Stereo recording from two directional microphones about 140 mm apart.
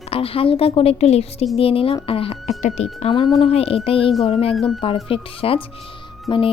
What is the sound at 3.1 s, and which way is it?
Speech, 30° left (ahead or behind).